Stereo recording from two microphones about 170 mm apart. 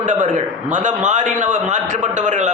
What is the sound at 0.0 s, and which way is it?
A man's voice, 45° right (ahead or behind).